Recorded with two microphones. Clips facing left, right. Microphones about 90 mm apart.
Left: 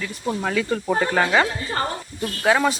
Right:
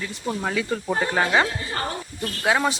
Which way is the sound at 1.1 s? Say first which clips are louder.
Even; 15° right (ahead or behind).